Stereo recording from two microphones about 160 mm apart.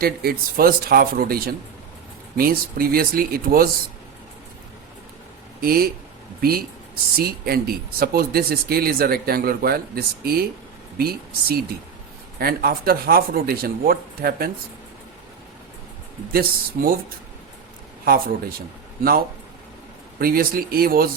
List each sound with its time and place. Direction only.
0.0 s speech: 70° right (ahead or behind)
5.5 s speech: 70° right (ahead or behind)
16.3 s speech: 70° right (ahead or behind)
18.0 s speech: 70° right (ahead or behind)
20.1 s speech: 70° right (ahead or behind)